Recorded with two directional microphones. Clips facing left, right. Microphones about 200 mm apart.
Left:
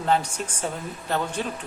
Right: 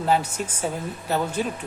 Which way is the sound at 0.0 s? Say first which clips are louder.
Right 1 dB; 5° right (ahead or behind).